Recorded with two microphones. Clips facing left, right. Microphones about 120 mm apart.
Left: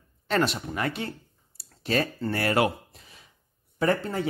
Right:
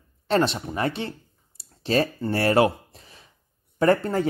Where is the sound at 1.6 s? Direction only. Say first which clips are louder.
Right 4 dB; 30° right (ahead or behind).